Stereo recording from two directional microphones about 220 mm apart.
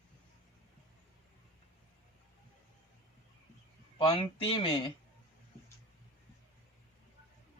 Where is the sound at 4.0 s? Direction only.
20° left (ahead or behind).